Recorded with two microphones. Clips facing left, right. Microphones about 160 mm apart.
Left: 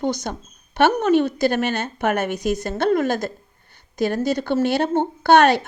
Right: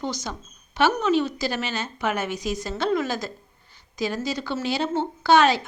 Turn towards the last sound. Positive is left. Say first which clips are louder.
# left 4 dB
turn(degrees=60)  # may be behind; listen again after turning